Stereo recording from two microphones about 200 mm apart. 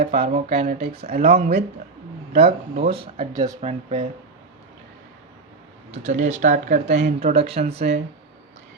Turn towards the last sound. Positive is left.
turn(degrees=-30)  # may be behind; listen again after turning